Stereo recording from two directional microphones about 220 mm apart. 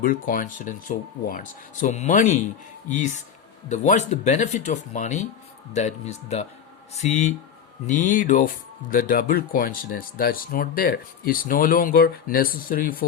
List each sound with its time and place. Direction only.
0.0 s speech: 40° left (ahead or behind)
3.7 s speech: 30° left (ahead or behind)